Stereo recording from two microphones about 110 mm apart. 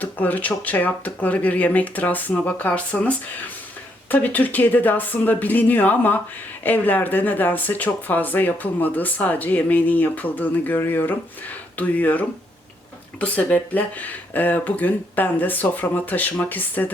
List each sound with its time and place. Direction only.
0.0 s speech: 15° left (ahead or behind)